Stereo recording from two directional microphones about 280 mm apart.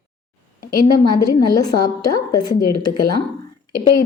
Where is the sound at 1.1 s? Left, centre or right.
Centre.